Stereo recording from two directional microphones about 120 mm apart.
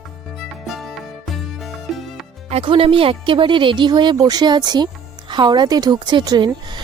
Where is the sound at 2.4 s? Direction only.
55° right (ahead or behind).